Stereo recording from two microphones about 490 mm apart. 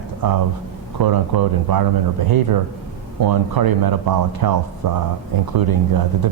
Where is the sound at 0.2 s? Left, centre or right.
Right.